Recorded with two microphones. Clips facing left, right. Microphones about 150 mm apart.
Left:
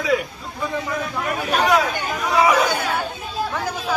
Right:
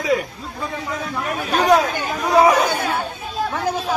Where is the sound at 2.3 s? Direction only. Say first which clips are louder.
Right 3 dB; 40° right (ahead or behind).